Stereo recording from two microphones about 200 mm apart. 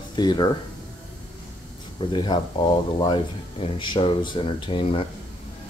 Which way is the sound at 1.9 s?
25° left (ahead or behind).